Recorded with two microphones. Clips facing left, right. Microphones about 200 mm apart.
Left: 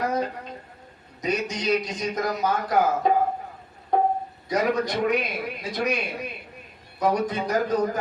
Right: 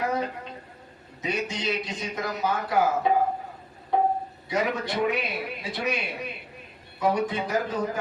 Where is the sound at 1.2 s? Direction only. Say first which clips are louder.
Left 3 dB; 40° left (ahead or behind).